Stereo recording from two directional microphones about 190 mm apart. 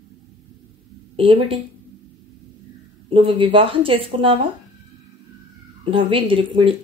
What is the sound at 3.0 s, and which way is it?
A woman's voice, 30° right (ahead or behind).